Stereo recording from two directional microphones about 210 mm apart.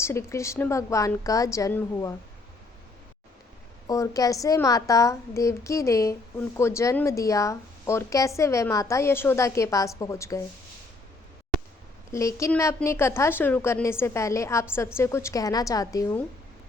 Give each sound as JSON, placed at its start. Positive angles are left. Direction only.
{"t": 0.0, "sound": "a woman's voice", "side_deg": 15}
{"t": 3.8, "sound": "a woman's voice", "side_deg": 15}
{"t": 12.1, "sound": "a woman's voice", "side_deg": 15}